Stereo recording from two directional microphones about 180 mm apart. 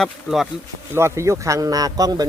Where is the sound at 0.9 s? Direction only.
15° right (ahead or behind).